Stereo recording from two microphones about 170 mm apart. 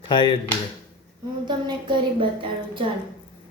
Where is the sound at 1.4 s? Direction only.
25° right (ahead or behind).